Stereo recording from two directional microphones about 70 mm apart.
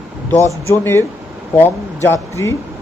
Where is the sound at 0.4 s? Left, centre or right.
Left.